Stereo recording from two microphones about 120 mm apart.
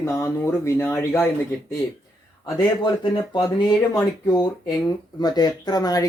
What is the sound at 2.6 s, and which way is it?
Speech, 40° left (ahead or behind).